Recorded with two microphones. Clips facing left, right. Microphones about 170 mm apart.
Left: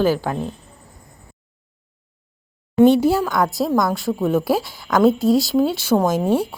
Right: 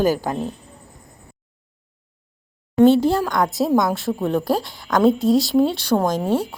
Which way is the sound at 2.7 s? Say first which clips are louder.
Left 1 dB; 10° left (ahead or behind).